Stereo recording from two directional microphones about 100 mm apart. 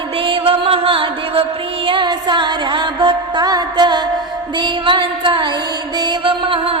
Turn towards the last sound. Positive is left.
turn(degrees=-65)  # may be behind; listen again after turning